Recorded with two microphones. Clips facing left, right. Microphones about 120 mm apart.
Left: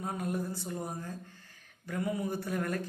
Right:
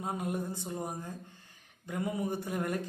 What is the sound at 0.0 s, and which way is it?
Speech, 20° right (ahead or behind).